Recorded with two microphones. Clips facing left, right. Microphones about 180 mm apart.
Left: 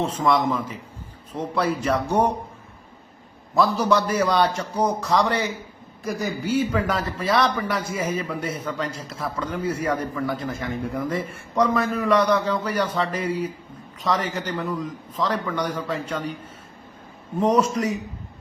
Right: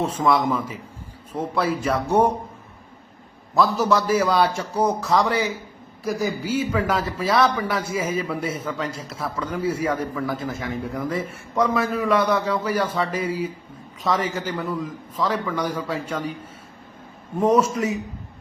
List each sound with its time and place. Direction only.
0.0 s a man's voice: 10° right (ahead or behind)
3.5 s a man's voice: centre (ahead or behind)
17.6 s a man's voice: 5° right (ahead or behind)